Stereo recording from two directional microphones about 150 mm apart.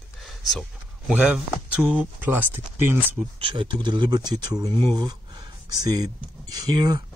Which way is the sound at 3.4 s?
35° right (ahead or behind).